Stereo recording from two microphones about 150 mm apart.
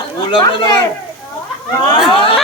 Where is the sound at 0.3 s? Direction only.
35° left (ahead or behind).